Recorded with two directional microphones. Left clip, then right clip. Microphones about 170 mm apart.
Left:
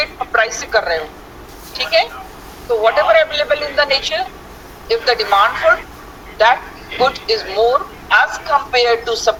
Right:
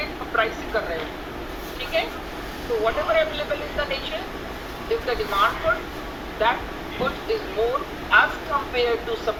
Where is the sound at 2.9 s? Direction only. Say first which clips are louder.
Left 10 dB; 85° left.